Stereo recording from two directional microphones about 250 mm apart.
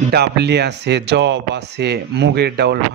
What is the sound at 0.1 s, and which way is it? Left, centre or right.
Speech, right.